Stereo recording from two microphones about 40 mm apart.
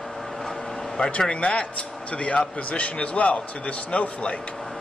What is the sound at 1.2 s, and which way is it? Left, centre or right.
A man's voice, left.